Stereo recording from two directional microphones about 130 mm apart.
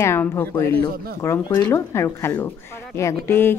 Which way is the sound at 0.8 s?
30° left (ahead or behind).